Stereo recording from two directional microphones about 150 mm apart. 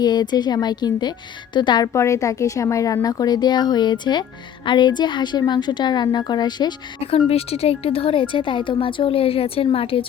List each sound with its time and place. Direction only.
0.0 s a woman's voice: 30° left (ahead or behind)
7.0 s a woman's voice: 40° left (ahead or behind)